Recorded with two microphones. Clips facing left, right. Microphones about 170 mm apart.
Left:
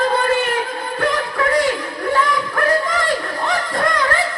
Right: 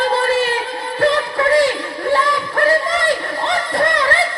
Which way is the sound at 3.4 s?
25° right (ahead or behind).